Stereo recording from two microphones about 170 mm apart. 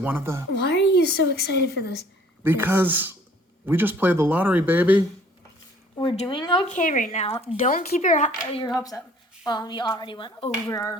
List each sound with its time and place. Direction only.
0.0 s speech: 10° right (ahead or behind)
0.5 s a woman's voice: 80° left
2.4 s speech: 10° right (ahead or behind)
6.0 s speech: 30° left (ahead or behind)
6.7 s a woman's voice: 50° left (ahead or behind)
7.7 s a woman's voice: 50° left (ahead or behind)
8.9 s a woman's voice: 15° left (ahead or behind)
9.5 s speech: 25° left (ahead or behind)